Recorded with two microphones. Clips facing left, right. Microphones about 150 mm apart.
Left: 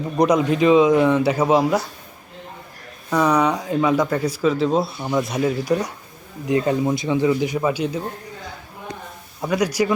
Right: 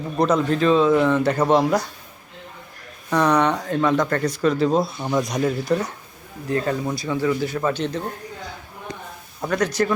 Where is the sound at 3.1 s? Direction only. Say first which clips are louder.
Even; 10° left (ahead or behind).